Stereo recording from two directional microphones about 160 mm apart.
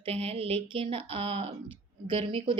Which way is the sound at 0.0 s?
35° right (ahead or behind).